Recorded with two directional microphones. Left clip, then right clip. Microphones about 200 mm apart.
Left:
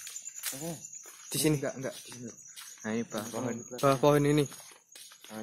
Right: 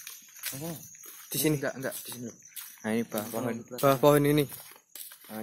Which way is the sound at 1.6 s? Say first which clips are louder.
Right 2 dB; 15° right (ahead or behind).